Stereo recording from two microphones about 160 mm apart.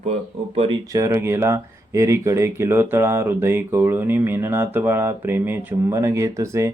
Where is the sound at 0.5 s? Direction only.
40° right (ahead or behind).